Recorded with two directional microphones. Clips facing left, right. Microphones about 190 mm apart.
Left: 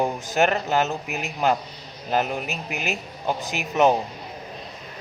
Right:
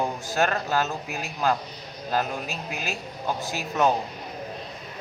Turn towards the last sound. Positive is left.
turn(degrees=20)  # may be behind; listen again after turning